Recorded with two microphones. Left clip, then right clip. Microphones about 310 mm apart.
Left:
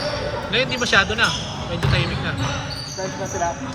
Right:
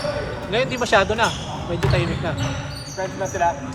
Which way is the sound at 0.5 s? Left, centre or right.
Centre.